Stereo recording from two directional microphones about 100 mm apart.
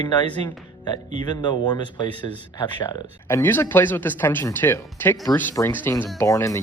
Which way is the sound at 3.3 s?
20° left (ahead or behind).